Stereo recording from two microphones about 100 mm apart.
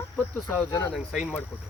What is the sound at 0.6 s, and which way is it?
Speech, 20° left (ahead or behind).